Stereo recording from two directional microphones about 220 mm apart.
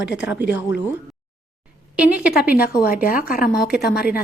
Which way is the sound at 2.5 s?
40° left (ahead or behind).